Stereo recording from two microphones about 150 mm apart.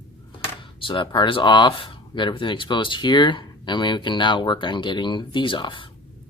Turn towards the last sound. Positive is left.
turn(degrees=35)  # may be behind; listen again after turning